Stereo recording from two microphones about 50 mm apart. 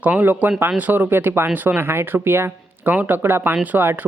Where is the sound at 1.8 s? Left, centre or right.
Right.